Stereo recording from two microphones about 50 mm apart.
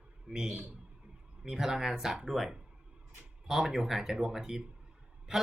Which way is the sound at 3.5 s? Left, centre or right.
Centre.